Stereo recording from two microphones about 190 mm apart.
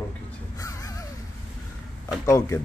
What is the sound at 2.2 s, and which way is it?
Speech, 15° left (ahead or behind).